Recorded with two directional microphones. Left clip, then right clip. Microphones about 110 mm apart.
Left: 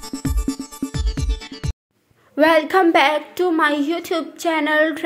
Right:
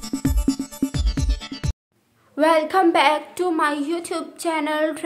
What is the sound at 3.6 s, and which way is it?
A woman's voice, 15° left (ahead or behind).